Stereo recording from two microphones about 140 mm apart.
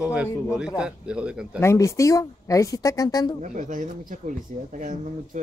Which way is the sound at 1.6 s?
20° left (ahead or behind).